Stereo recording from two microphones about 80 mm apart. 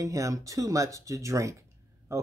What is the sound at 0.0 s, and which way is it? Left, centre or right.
Speech, right.